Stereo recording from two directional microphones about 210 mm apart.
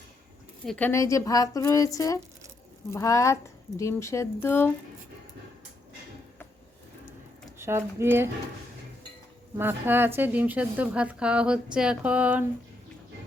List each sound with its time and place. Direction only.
0.6 s a woman's voice: 5° left (ahead or behind)
7.6 s a woman's voice: 10° right (ahead or behind)
9.6 s a woman's voice: 10° right (ahead or behind)